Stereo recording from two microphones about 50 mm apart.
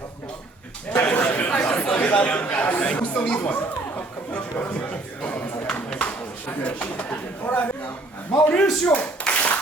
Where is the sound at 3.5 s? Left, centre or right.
Left.